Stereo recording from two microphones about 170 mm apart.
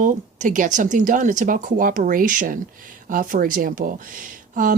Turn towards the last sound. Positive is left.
turn(degrees=-55)  # may be behind; listen again after turning